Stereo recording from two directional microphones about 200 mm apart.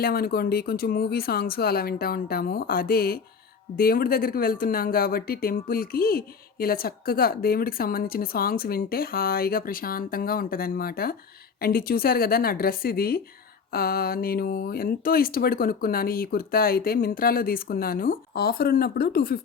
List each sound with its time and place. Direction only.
0.0 s speech: 50° left (ahead or behind)